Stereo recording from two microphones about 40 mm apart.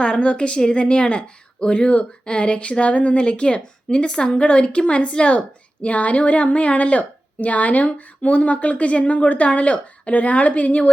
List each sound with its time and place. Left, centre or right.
0.0 s a woman's voice: left
3.2 s a woman's voice: left